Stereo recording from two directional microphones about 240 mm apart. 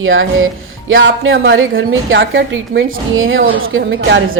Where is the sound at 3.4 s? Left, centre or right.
Right.